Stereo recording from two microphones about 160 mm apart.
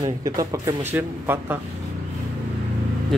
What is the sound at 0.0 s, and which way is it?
Speech, 20° right (ahead or behind).